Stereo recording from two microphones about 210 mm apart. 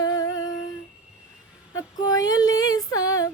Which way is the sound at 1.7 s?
15° left (ahead or behind).